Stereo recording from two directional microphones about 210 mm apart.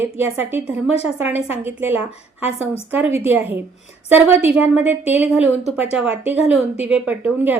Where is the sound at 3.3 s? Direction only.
10° right (ahead or behind).